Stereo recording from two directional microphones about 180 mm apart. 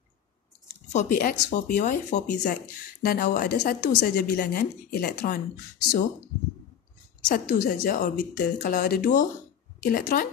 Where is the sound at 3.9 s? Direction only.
60° left (ahead or behind).